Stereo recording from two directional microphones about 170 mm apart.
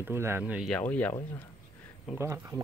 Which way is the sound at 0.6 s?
5° left (ahead or behind).